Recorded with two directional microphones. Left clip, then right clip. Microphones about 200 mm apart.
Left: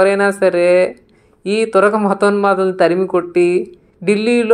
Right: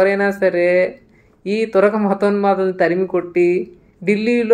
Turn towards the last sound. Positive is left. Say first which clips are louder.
# left 3 dB
turn(degrees=20)  # may be behind; listen again after turning